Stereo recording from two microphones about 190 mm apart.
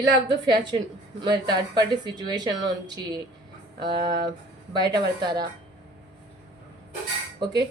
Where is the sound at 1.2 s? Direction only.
20° right (ahead or behind).